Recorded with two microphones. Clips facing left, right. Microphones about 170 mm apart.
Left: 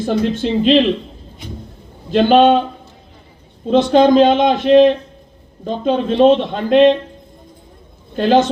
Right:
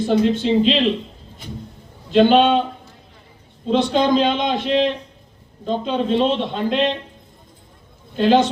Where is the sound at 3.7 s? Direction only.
50° left (ahead or behind).